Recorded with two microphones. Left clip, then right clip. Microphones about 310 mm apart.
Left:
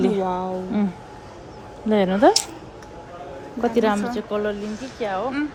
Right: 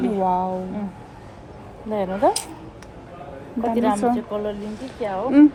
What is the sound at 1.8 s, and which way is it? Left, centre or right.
Speech, left.